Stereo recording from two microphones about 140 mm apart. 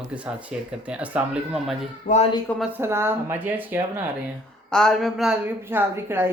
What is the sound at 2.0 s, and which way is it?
Speech, 55° left (ahead or behind).